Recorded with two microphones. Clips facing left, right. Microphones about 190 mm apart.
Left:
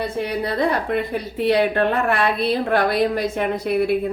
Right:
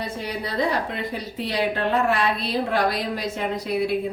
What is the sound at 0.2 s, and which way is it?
A woman's voice, 55° left (ahead or behind).